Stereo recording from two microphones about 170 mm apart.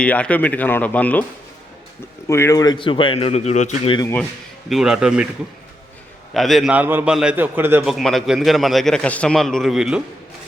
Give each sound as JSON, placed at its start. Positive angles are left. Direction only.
{"t": 0.0, "sound": "speech", "side_deg": 10}
{"t": 2.2, "sound": "speech", "side_deg": 15}
{"t": 4.7, "sound": "a man's voice", "side_deg": -5}
{"t": 6.3, "sound": "a man's voice", "side_deg": 0}
{"t": 7.9, "sound": "a man's voice", "side_deg": 0}